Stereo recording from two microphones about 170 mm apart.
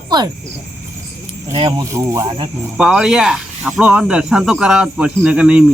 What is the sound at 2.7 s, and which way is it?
Speech, 5° right (ahead or behind).